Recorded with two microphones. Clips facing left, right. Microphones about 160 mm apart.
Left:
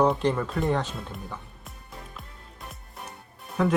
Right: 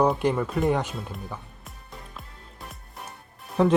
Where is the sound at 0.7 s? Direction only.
15° right (ahead or behind).